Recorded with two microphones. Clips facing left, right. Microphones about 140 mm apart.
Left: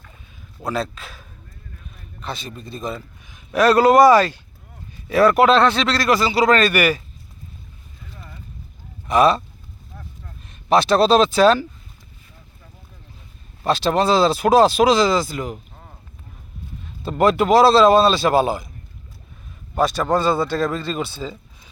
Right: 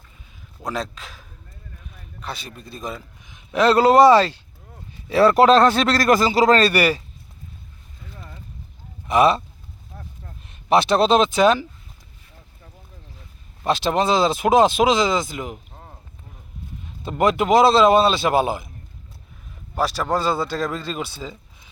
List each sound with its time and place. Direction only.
0.7 s a man's voice: 15° right (ahead or behind)
3.2 s a man's voice: 20° right (ahead or behind)
9.0 s speech: 25° right (ahead or behind)
10.4 s speech: 20° right (ahead or behind)
13.7 s speech: 20° right (ahead or behind)
17.0 s speech: 15° right (ahead or behind)
19.7 s speech: 10° right (ahead or behind)